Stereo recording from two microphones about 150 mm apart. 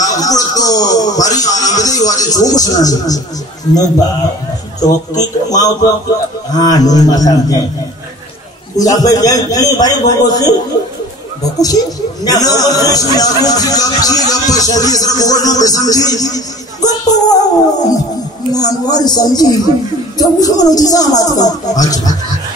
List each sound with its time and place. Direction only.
0.0 s speech: 25° left (ahead or behind)
8.7 s speech: 25° left (ahead or behind)
11.5 s speech: 25° left (ahead or behind)
18.5 s speech: 25° left (ahead or behind)